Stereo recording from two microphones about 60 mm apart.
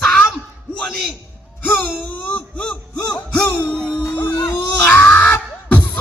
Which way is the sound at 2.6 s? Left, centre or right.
Centre.